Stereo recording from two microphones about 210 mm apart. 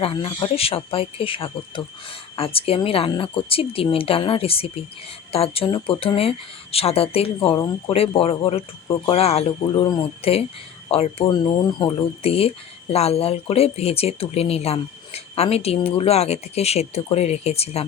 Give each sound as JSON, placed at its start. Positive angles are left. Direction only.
{"t": 0.0, "sound": "speech", "side_deg": 25}